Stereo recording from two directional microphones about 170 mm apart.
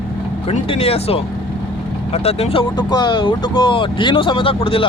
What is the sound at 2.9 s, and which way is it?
Speech, 25° left (ahead or behind).